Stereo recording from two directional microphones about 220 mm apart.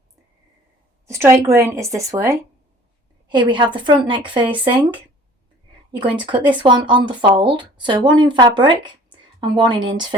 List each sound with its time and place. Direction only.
1.0 s speech: 10° right (ahead or behind)
5.9 s speech: 20° right (ahead or behind)